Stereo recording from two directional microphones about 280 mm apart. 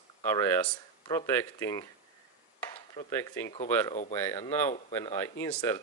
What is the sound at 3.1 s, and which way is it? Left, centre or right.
Speech, centre.